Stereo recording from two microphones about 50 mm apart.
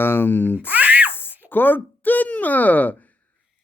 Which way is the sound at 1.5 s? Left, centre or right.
Left.